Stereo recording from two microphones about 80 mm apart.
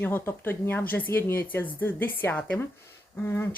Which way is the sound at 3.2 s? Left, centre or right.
Left.